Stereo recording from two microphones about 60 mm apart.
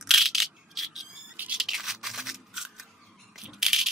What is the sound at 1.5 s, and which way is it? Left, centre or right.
Scissors, centre.